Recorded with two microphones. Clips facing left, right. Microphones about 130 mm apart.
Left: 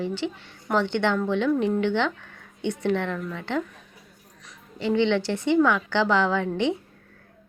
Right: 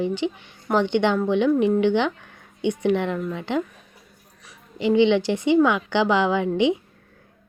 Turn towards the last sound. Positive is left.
turn(degrees=-15)  # may be behind; listen again after turning